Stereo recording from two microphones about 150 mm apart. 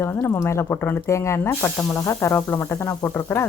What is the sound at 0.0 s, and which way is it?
Speech, 15° left (ahead or behind).